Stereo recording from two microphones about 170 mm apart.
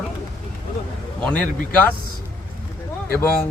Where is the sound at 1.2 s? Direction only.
5° left (ahead or behind).